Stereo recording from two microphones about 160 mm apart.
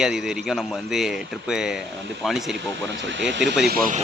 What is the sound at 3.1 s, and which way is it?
Speech, 90° right.